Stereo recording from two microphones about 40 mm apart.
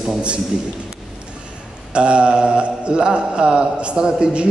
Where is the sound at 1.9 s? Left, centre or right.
Right.